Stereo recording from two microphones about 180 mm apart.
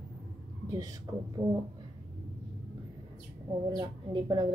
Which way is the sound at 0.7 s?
20° right (ahead or behind).